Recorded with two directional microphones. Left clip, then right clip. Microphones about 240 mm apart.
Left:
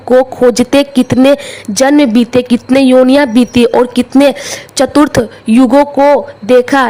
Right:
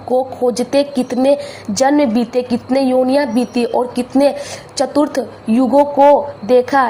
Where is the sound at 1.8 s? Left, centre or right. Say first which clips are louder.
Left 5 dB; left.